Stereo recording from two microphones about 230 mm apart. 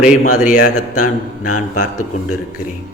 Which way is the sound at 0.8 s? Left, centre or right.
Left.